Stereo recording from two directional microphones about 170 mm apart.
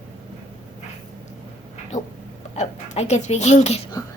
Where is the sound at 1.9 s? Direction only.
45° left (ahead or behind).